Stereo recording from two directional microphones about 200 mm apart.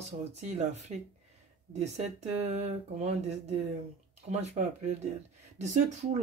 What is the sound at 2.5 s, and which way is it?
Speech, 35° right (ahead or behind).